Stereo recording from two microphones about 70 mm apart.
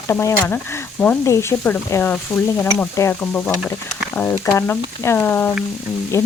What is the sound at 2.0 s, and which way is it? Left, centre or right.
Speech, left.